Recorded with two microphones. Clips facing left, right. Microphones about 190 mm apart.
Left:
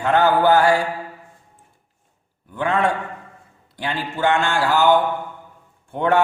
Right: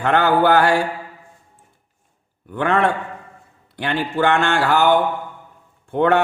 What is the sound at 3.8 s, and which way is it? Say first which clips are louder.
A man's voice: right 3 dB; 65° right (ahead or behind).